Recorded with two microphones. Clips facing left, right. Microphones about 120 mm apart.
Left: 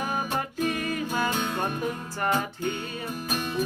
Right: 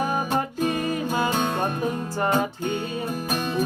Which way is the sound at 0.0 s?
35° right (ahead or behind).